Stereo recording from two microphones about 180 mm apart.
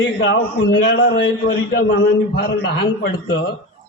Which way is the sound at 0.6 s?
90° left.